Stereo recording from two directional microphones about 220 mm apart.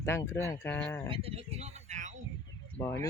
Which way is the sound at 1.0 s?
25° right (ahead or behind).